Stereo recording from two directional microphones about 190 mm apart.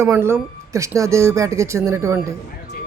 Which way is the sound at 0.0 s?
10° right (ahead or behind).